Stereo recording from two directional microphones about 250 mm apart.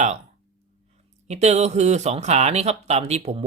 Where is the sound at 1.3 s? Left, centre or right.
Right.